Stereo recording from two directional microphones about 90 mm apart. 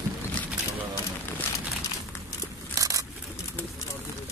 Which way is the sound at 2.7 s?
40° right (ahead or behind).